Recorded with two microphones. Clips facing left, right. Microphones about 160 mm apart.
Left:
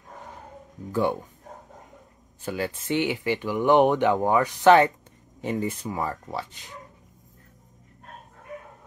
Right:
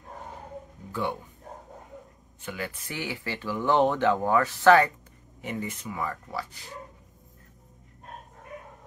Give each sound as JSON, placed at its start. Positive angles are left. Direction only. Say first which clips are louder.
{"t": 2.4, "sound": "speech", "louder": "left 6 dB", "side_deg": 30}
{"t": 5.4, "sound": "speech", "louder": "left 6 dB", "side_deg": 30}